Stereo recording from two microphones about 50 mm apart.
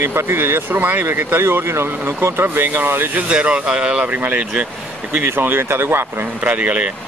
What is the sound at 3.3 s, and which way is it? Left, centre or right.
Speech, right.